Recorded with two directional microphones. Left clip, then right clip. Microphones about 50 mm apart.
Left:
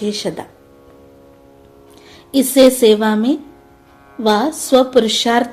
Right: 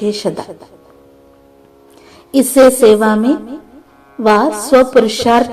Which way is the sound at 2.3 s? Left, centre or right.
Right.